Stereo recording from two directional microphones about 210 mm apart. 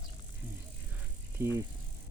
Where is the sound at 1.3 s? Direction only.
10° right (ahead or behind).